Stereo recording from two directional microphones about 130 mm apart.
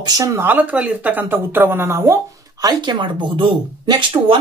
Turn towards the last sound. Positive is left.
turn(degrees=-40)  # may be behind; listen again after turning